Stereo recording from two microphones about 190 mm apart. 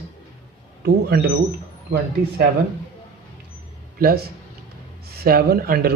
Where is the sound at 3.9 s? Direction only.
55° right (ahead or behind).